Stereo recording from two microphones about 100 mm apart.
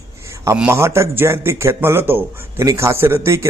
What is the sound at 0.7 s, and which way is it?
Speech, 30° right (ahead or behind).